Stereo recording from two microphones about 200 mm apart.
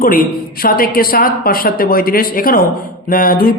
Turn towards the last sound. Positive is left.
turn(degrees=45)  # may be behind; listen again after turning